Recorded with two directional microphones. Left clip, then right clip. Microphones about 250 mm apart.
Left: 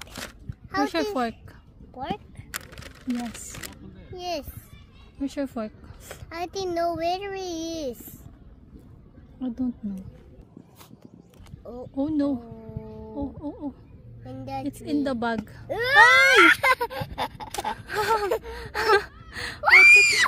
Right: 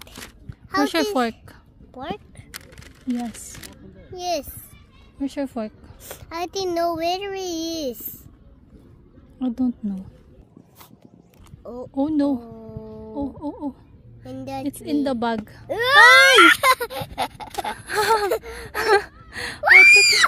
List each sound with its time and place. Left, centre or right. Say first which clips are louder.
0.7 s a child's voice: right 4 dB; right
4.1 s a child's voice: right 6 dB; right
5.2 s speech: right 3 dB; centre
6.0 s a child's voice: right 4 dB; right
9.4 s speech: right 6 dB; right
11.6 s speech: right 4 dB; right
11.9 s speech: right 4 dB; right
14.2 s a child's voice: right 3 dB; right
14.7 s speech: right 4 dB; right
15.7 s a child's voice: right 4 dB; right
17.7 s speech: right 5 dB; right